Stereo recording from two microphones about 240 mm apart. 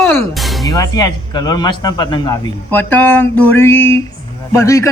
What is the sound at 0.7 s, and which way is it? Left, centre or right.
A man's voice, centre.